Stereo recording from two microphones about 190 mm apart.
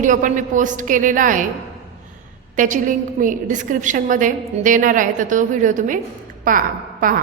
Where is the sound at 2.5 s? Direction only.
45° right (ahead or behind).